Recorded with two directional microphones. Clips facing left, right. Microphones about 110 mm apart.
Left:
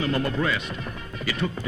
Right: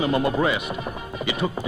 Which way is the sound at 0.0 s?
15° right (ahead or behind).